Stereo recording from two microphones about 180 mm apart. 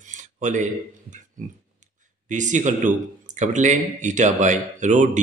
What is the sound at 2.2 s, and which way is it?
Speech, 45° right (ahead or behind).